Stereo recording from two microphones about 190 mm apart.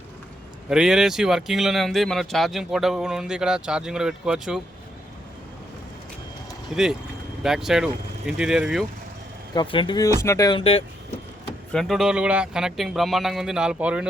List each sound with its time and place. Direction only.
0.7 s speech: 5° right (ahead or behind)
7.4 s speech: centre (ahead or behind)
9.6 s speech: 25° left (ahead or behind)
10.6 s speech: 30° left (ahead or behind)
11.7 s speech: centre (ahead or behind)